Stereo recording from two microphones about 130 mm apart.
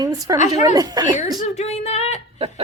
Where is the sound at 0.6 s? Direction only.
30° right (ahead or behind).